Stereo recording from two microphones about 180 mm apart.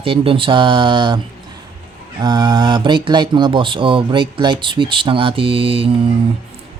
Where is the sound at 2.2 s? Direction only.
25° right (ahead or behind).